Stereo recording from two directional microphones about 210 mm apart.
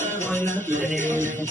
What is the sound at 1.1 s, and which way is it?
Jingle bell, 35° right (ahead or behind).